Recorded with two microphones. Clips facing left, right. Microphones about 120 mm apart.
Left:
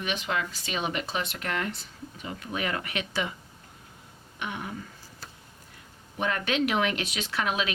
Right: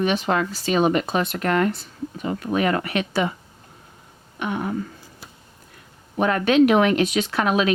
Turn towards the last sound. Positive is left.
turn(degrees=-45)  # may be behind; listen again after turning